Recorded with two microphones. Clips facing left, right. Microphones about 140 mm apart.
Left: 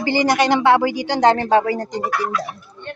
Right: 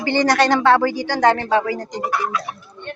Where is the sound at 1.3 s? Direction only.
40° left (ahead or behind).